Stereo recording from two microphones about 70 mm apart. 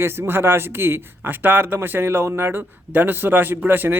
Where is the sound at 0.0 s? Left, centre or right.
Right.